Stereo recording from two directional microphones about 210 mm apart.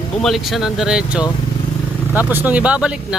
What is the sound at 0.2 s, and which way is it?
Speech, centre (ahead or behind).